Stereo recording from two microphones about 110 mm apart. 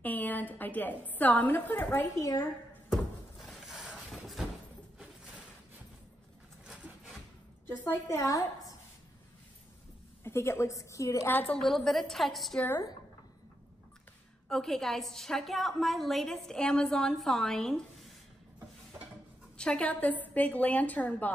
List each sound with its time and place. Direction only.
0.0 s a woman's voice: 15° left (ahead or behind)
2.9 s a sound: centre (ahead or behind)
6.6 s wood: 5° right (ahead or behind)
7.6 s a woman's voice: 20° left (ahead or behind)
10.2 s a woman's voice: 25° left (ahead or behind)
11.4 s a woman's voice: 5° left (ahead or behind)
14.5 s a woman's voice: 5° left (ahead or behind)
19.5 s a woman's voice: 10° left (ahead or behind)